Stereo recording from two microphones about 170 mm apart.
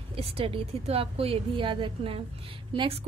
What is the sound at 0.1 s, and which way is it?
A woman's voice, 35° right (ahead or behind).